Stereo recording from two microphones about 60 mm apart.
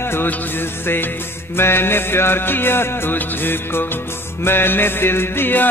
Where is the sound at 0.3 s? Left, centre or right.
Left.